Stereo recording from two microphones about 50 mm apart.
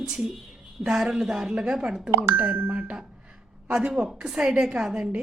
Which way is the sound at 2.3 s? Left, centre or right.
Right.